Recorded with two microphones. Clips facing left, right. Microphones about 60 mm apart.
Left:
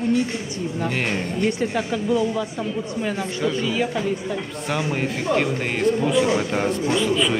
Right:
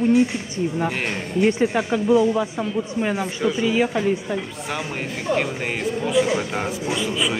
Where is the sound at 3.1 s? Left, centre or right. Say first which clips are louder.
Even; centre.